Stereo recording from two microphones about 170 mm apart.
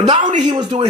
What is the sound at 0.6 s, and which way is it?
Speech, 30° right (ahead or behind).